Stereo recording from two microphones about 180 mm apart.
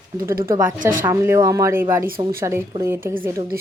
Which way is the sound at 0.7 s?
45° right (ahead or behind).